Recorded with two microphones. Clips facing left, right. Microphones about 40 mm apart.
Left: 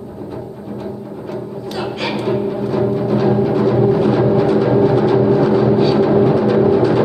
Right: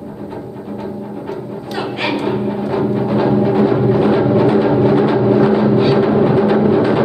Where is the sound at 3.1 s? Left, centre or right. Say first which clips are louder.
Right 2 dB; right.